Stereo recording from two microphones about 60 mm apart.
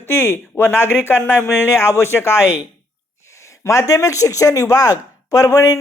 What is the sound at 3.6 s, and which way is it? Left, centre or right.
Speech, left.